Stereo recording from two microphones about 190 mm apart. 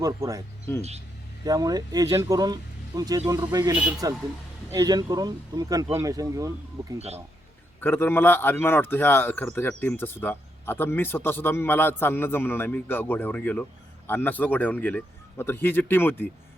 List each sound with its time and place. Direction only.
0.0 s speech: 20° right (ahead or behind)
0.8 s speech: 35° right (ahead or behind)
1.5 s speech: 20° right (ahead or behind)
7.8 s speech: 10° left (ahead or behind)